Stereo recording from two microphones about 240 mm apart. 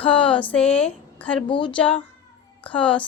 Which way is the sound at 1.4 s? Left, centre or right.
Centre.